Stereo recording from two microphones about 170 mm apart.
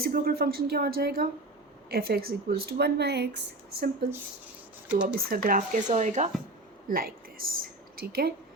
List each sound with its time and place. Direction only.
0.0 s speech: 60° right (ahead or behind)
5.0 s speech: 55° right (ahead or behind)
5.9 s speech: 45° right (ahead or behind)
6.8 s speech: 55° right (ahead or behind)